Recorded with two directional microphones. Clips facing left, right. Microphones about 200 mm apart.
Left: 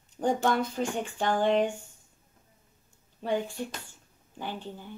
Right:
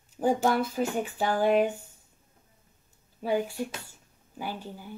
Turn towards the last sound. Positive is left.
turn(degrees=-10)  # may be behind; listen again after turning